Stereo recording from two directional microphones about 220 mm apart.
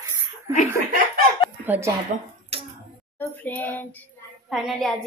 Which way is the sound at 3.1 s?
10° left (ahead or behind).